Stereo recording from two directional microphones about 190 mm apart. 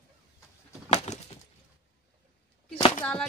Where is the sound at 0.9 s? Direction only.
35° left (ahead or behind).